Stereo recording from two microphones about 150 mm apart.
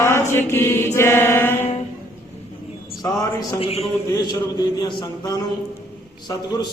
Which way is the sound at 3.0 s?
25° left (ahead or behind).